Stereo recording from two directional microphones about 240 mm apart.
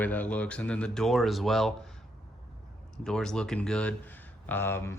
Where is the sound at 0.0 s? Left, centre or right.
Centre.